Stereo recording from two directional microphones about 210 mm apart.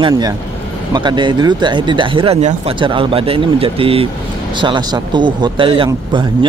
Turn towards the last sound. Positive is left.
turn(degrees=-25)  # may be behind; listen again after turning